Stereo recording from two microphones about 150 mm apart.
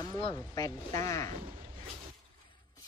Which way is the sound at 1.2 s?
55° right (ahead or behind).